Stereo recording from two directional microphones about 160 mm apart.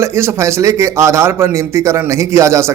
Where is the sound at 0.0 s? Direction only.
15° right (ahead or behind).